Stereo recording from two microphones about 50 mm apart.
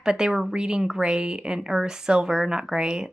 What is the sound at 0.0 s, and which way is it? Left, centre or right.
A woman's voice, centre.